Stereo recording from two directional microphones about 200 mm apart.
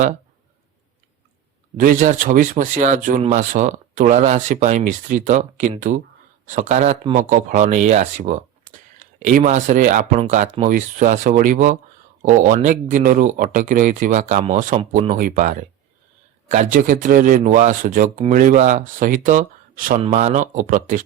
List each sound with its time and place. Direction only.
1.8 s speech: 40° right (ahead or behind)
3.2 s speech: 30° right (ahead or behind)
3.5 s speech: 40° right (ahead or behind)
20.0 s speech: 35° right (ahead or behind)